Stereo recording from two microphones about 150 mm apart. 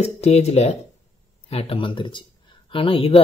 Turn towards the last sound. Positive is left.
turn(degrees=40)  # may be behind; listen again after turning